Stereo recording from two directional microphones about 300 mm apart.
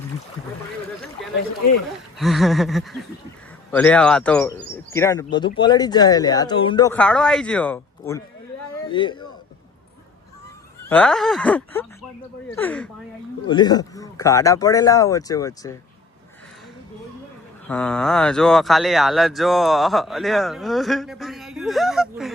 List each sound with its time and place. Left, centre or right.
1.2 s a sound: centre
2.1 s a man's voice: centre
10.8 s speech: centre
17.7 s speech: centre